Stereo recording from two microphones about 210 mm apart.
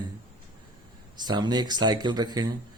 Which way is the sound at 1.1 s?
20° right (ahead or behind).